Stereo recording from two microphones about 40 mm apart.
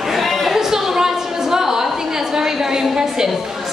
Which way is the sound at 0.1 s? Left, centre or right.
Centre.